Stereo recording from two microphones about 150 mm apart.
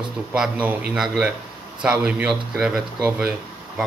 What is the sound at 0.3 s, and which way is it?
Speech, 10° right (ahead or behind).